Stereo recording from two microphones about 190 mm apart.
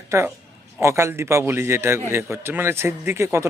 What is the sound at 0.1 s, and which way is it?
A man's voice, 15° right (ahead or behind).